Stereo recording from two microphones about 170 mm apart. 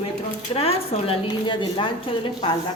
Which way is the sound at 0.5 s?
35° left (ahead or behind).